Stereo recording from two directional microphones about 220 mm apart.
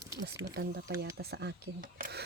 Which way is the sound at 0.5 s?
45° right (ahead or behind).